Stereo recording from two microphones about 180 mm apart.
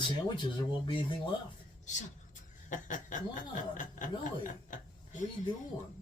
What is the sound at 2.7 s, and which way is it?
Speech, 45° left (ahead or behind).